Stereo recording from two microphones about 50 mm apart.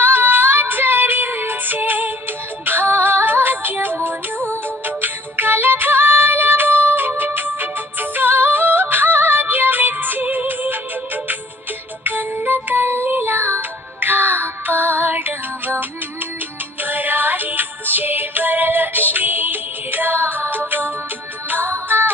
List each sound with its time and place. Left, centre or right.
0.0 s music: right